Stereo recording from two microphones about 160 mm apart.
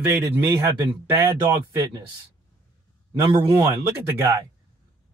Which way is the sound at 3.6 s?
20° right (ahead or behind).